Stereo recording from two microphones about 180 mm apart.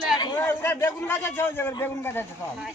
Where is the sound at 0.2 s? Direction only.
15° left (ahead or behind).